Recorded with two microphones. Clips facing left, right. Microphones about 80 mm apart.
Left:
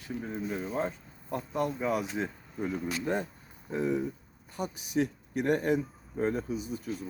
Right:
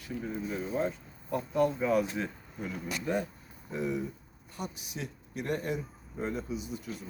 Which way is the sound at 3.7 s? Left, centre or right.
Left.